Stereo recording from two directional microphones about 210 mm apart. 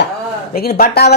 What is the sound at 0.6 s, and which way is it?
Speech, 45° left (ahead or behind).